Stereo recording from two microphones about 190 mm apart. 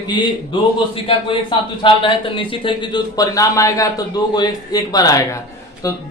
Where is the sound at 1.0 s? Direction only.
25° left (ahead or behind).